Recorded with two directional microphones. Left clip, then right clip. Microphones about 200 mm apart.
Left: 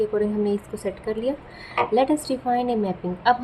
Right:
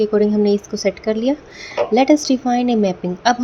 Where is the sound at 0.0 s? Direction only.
35° right (ahead or behind).